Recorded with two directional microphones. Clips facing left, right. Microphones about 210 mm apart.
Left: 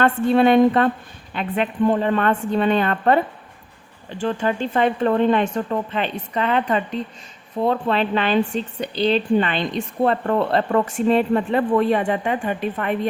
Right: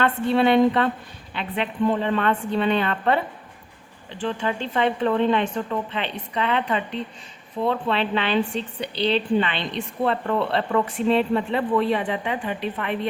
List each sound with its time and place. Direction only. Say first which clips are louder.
0.0 s speech: left 4 dB; 45° left (ahead or behind)
4.2 s speech: left 4 dB; 45° left (ahead or behind)